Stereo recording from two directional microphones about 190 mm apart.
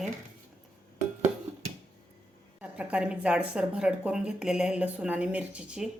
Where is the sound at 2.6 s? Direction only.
5° right (ahead or behind).